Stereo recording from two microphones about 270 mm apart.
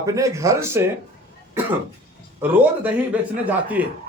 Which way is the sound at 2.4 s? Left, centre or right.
Centre.